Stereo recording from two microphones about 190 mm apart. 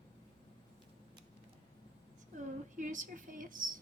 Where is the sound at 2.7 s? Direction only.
40° right (ahead or behind).